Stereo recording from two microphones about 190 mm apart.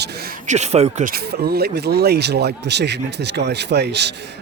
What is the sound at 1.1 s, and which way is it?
A man's voice, 55° right (ahead or behind).